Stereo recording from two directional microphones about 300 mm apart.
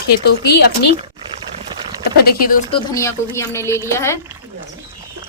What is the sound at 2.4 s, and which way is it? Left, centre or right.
Speech, left.